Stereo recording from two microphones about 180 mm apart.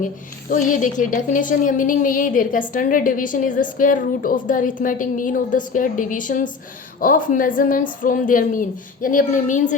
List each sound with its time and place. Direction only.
0.5 s a woman's voice: 45° left (ahead or behind)